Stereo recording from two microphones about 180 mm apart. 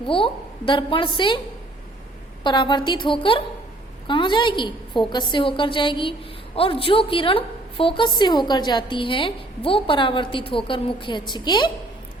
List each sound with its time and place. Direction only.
0.0 s a woman's voice: 30° left (ahead or behind)
2.4 s a woman's voice: 25° left (ahead or behind)